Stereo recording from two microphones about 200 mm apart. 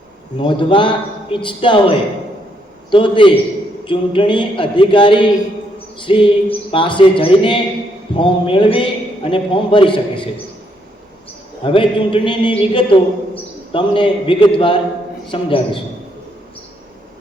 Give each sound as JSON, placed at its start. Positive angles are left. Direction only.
{"t": 0.3, "sound": "a man's voice", "side_deg": 25}
{"t": 11.6, "sound": "a man's voice", "side_deg": 25}